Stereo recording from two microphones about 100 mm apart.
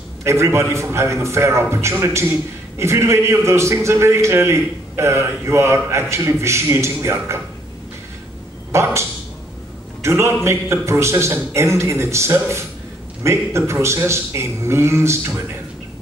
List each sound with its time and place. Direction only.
0.2 s a man's voice: 30° right (ahead or behind)
8.7 s a man's voice: 30° right (ahead or behind)
10.0 s a man's voice: 25° right (ahead or behind)